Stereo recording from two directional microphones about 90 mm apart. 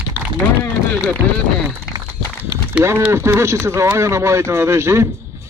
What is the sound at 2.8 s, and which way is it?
Speech, 30° right (ahead or behind).